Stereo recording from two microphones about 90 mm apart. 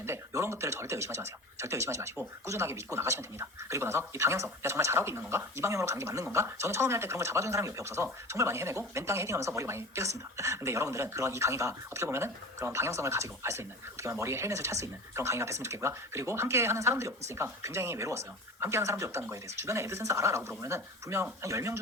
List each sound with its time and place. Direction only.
0.0 s a woman's voice: 30° right (ahead or behind)